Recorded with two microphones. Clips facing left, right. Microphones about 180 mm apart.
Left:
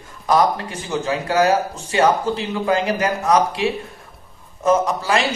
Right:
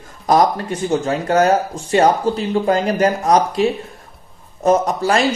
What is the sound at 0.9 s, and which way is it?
A man's voice, 45° right (ahead or behind).